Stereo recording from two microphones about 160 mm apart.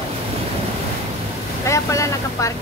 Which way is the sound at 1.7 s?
20° left (ahead or behind).